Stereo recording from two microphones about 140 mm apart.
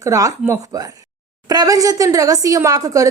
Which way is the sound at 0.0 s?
25° right (ahead or behind).